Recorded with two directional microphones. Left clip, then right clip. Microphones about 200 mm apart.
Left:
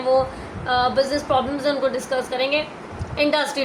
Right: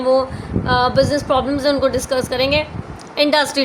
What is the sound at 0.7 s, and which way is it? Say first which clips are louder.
A woman's voice: right 4 dB; 50° right (ahead or behind).